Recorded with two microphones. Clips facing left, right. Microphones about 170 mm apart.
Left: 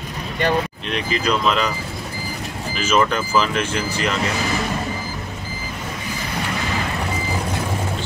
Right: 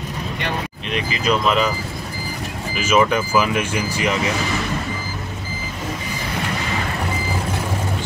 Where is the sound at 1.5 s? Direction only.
5° right (ahead or behind).